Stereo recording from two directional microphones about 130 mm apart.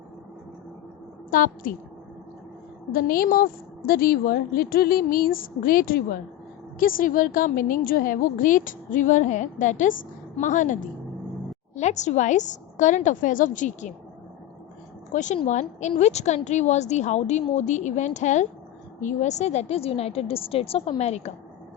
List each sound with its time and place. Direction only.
1.3 s a woman's voice: 90° left
2.9 s a woman's voice: 90° left
11.7 s a woman's voice: 65° left (ahead or behind)
15.1 s a woman's voice: 70° left (ahead or behind)